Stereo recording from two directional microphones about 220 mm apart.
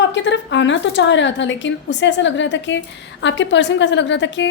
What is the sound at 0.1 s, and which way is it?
A woman's voice, 55° left (ahead or behind).